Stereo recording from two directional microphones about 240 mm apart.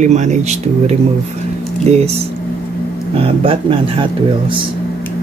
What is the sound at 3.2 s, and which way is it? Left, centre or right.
Speech, right.